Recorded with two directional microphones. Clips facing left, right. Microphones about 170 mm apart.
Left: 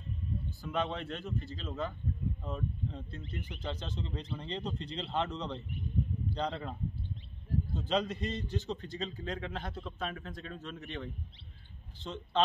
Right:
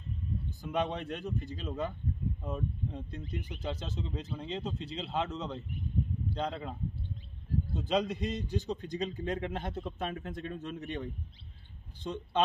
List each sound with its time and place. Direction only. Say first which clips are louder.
0.5 s a man's voice: right 2 dB; 15° right (ahead or behind)